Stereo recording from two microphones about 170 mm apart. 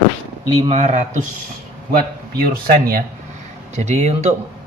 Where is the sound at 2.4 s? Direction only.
60° right (ahead or behind).